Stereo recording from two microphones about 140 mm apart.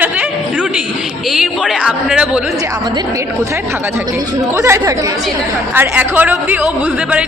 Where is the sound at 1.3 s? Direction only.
Centre (ahead or behind).